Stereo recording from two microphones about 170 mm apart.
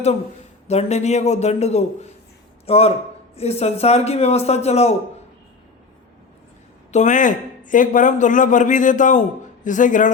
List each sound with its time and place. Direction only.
0.7 s a man's voice: 40° left (ahead or behind)
6.9 s speech: 45° left (ahead or behind)